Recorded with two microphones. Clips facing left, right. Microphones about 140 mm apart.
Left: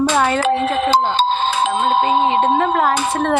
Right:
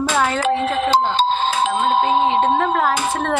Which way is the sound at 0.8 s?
85° left.